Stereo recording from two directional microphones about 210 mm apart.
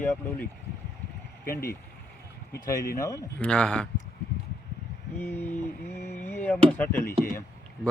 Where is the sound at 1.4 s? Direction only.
45° left (ahead or behind).